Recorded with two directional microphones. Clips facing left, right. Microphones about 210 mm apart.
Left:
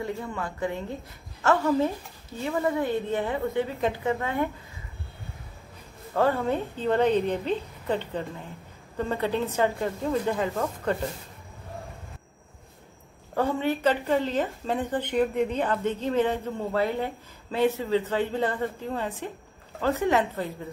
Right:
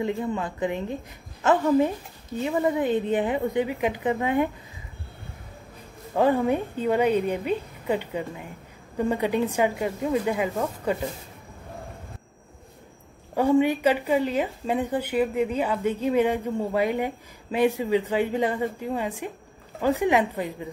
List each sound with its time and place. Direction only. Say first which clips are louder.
0.0 s a woman's voice: right 5 dB; 20° right (ahead or behind)
6.1 s speech: right 3 dB; 15° right (ahead or behind)
13.3 s speech: right 5 dB; 15° right (ahead or behind)